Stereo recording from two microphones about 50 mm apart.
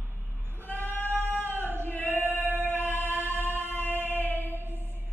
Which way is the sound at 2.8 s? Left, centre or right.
Left.